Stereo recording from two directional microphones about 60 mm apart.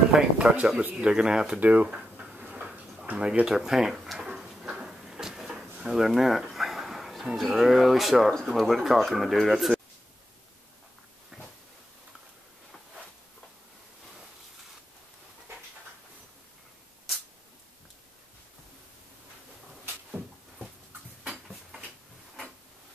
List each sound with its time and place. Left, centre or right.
0.1 s speech: centre
1.6 s speech: right
1.9 s a sound: centre
3.2 s speech: centre
4.4 s drawer open or close: centre
8.5 s speech: centre
21.3 s a sound: centre